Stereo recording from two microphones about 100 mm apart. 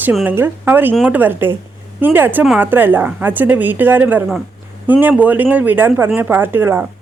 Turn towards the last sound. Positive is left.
turn(degrees=-20)  # may be behind; listen again after turning